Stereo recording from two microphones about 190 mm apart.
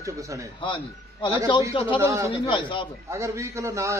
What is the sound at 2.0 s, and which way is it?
Speech, 15° right (ahead or behind).